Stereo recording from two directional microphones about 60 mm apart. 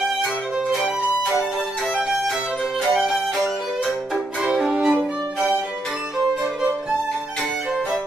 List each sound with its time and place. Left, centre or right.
2.9 s music: centre
4.5 s violin: centre